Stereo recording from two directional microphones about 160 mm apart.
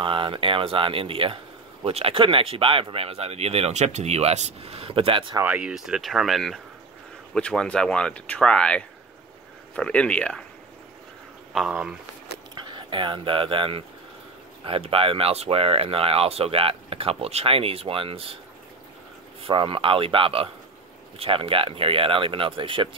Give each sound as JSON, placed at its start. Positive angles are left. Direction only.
{"t": 0.0, "sound": "speech", "side_deg": -35}
{"t": 5.4, "sound": "speech", "side_deg": -10}
{"t": 11.5, "sound": "speech", "side_deg": -5}
{"t": 12.6, "sound": "speech", "side_deg": -30}
{"t": 19.4, "sound": "speech", "side_deg": -35}